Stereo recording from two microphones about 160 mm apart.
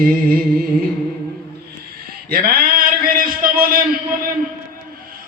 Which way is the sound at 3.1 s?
65° right (ahead or behind).